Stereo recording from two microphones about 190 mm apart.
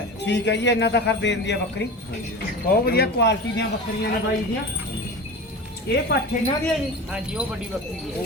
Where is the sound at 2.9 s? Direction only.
55° left (ahead or behind).